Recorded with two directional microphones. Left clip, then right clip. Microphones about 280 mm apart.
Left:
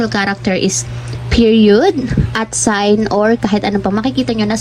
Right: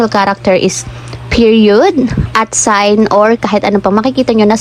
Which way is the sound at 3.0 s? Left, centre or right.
Left.